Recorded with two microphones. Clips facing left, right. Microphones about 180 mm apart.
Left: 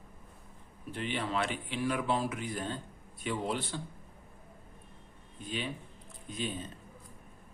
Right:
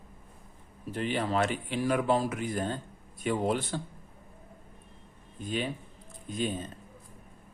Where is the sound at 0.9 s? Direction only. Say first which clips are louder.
Right 5 dB; 40° right (ahead or behind).